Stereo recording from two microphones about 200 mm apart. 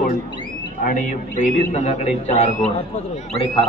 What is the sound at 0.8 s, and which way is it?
A man's voice, 40° left (ahead or behind).